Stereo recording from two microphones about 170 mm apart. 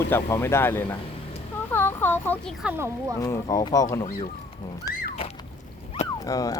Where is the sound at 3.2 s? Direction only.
20° left (ahead or behind).